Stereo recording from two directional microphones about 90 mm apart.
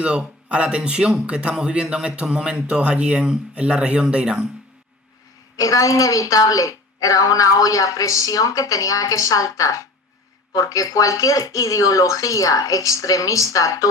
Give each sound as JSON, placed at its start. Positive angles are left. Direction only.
{"t": 0.0, "sound": "speech", "side_deg": -10}
{"t": 5.5, "sound": "a woman's voice", "side_deg": 40}